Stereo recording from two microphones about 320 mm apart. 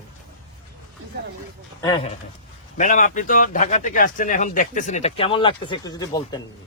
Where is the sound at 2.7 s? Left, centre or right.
Left.